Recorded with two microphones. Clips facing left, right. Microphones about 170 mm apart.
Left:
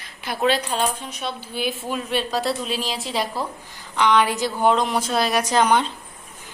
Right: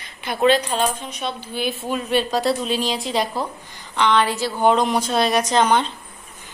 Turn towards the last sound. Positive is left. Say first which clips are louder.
# right 1 dB
turn(degrees=10)  # may be behind; listen again after turning